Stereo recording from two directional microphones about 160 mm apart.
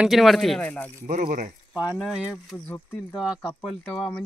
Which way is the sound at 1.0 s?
55° right (ahead or behind).